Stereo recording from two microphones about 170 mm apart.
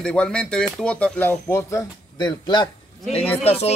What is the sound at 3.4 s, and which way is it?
Speech, 40° left (ahead or behind).